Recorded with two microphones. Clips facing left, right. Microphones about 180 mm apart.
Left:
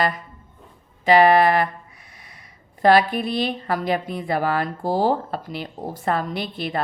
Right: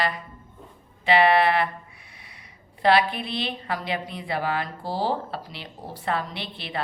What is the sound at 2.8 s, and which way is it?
A woman's voice, 45° left (ahead or behind).